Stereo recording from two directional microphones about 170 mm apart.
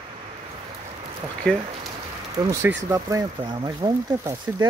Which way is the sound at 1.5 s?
5° left (ahead or behind).